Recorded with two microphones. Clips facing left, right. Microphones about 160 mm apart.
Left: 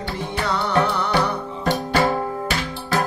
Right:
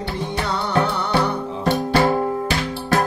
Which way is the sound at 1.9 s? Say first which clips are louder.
Right 2 dB; 10° right (ahead or behind).